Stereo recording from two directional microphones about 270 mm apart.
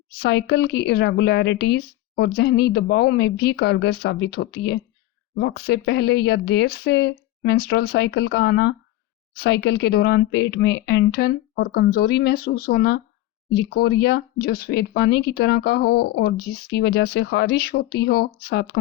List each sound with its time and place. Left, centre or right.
0.2 s speech: left